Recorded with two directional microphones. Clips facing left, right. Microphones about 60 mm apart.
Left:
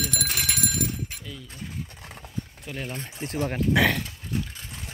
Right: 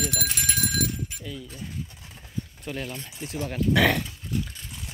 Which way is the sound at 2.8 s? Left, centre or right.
Left.